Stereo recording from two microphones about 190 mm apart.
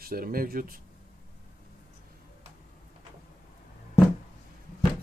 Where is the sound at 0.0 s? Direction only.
50° right (ahead or behind).